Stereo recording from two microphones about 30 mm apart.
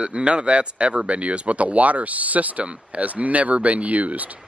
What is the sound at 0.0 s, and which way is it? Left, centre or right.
Speech, right.